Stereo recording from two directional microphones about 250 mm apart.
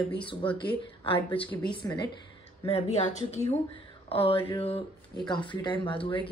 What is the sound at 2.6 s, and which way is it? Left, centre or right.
A woman's voice, left.